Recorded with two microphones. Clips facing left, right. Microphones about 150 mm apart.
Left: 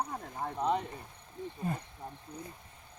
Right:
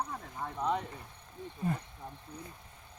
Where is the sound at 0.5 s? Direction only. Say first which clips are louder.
Left 2 dB; 25° left (ahead or behind).